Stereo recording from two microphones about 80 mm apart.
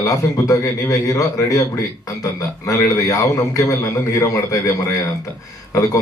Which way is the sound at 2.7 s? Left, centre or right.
Left.